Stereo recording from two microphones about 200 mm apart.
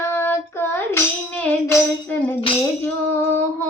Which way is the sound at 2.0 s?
10° left (ahead or behind).